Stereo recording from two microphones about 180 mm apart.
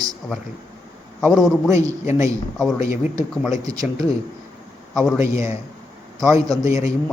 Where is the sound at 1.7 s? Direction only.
15° right (ahead or behind).